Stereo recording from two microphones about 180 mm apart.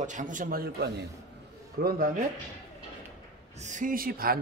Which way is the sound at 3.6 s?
45° right (ahead or behind).